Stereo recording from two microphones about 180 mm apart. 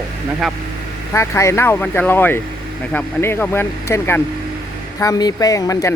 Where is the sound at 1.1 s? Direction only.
15° left (ahead or behind).